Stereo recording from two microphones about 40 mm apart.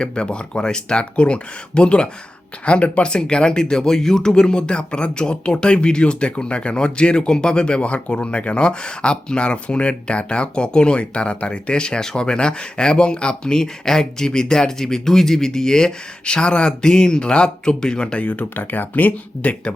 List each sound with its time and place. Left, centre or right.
0.0 s speech: left
1.1 s speech: left
18.5 s speech: left